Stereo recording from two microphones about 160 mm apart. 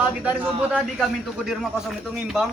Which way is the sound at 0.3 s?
10° right (ahead or behind).